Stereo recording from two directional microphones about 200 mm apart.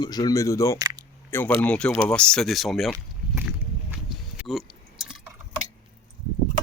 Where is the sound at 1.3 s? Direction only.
10° left (ahead or behind).